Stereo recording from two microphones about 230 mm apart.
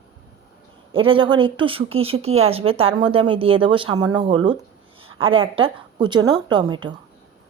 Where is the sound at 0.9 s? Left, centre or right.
Right.